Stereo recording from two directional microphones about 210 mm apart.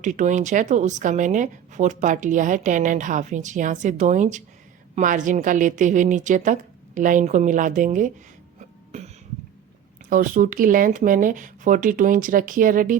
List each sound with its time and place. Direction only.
0.0 s speech: 35° right (ahead or behind)
10.1 s speech: 40° right (ahead or behind)